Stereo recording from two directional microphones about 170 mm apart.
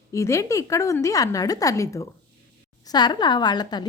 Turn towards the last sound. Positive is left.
turn(degrees=25)  # may be behind; listen again after turning